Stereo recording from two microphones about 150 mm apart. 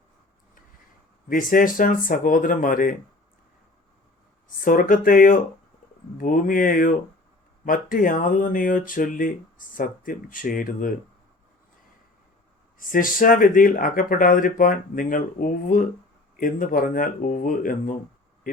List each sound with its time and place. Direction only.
1.3 s speech: 65° left (ahead or behind)
4.4 s speech: 60° left (ahead or behind)
12.8 s speech: 65° left (ahead or behind)